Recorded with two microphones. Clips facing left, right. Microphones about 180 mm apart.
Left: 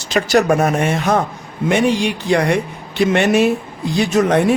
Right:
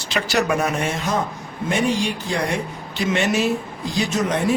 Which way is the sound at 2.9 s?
60° left (ahead or behind).